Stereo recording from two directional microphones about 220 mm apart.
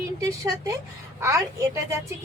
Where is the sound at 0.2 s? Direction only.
15° right (ahead or behind).